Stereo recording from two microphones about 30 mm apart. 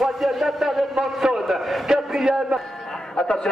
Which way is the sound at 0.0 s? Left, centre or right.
Centre.